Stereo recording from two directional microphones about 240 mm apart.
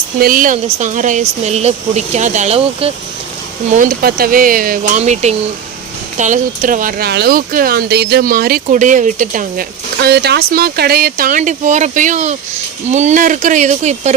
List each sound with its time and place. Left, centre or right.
0.2 s speech: right